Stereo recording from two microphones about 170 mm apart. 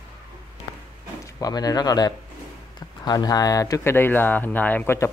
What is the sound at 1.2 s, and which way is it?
Speech, 20° left (ahead or behind).